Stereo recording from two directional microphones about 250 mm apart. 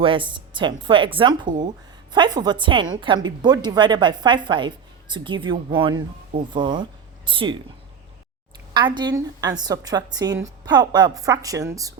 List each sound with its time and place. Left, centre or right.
0.0 s a woman's voice: centre
8.7 s speech: centre